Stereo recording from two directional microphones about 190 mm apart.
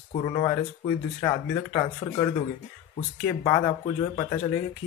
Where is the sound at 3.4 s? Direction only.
20° left (ahead or behind).